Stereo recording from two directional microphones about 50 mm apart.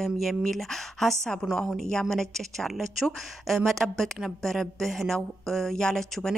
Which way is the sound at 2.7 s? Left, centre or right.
Centre.